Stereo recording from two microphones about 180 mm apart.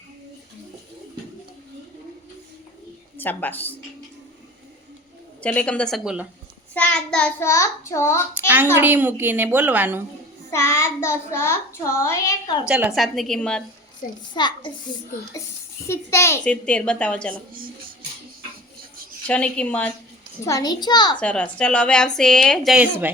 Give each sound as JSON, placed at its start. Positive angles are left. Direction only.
{"t": 3.2, "sound": "a child's voice", "side_deg": 10}
{"t": 5.4, "sound": "a child's voice", "side_deg": 5}
{"t": 8.4, "sound": "a woman's voice", "side_deg": -10}
{"t": 10.5, "sound": "a child's voice", "side_deg": 15}
{"t": 12.6, "sound": "a woman's voice", "side_deg": -5}
{"t": 14.0, "sound": "a child's voice", "side_deg": 50}
{"t": 14.3, "sound": "a child's voice", "side_deg": 25}
{"t": 15.9, "sound": "a child's voice", "side_deg": 15}
{"t": 19.3, "sound": "a child's voice", "side_deg": 5}
{"t": 20.4, "sound": "a child's voice", "side_deg": 20}
{"t": 21.2, "sound": "a woman's voice", "side_deg": 5}